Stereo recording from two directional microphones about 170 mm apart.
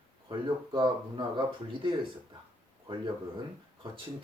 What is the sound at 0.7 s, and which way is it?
Speech, 25° right (ahead or behind).